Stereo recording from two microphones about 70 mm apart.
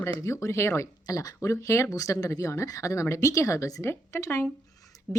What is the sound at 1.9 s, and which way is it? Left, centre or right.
Speech, left.